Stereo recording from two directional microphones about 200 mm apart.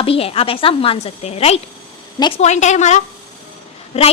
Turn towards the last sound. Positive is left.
turn(degrees=30)  # may be behind; listen again after turning